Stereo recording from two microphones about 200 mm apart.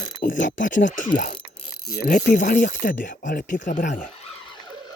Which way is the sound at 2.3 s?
40° left (ahead or behind).